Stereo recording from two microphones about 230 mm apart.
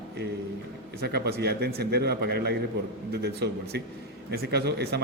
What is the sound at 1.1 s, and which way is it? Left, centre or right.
A man's voice, right.